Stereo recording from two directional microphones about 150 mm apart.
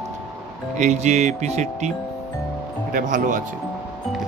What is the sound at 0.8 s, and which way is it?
Speech, 50° right (ahead or behind).